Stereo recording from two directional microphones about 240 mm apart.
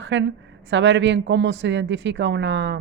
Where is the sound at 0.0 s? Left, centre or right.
Right.